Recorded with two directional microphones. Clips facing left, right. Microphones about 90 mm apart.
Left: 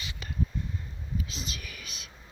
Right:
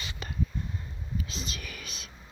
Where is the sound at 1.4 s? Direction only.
40° right (ahead or behind).